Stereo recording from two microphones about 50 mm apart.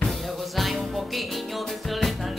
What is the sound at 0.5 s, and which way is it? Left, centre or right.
Music, centre.